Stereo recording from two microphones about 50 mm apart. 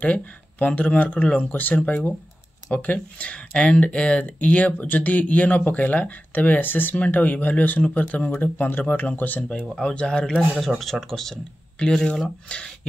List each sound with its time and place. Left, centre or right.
0.0 s speech: left
7.8 s speech: left
8.4 s speech: left
9.9 s speech: centre
10.8 s speech: centre; by 12.6 s left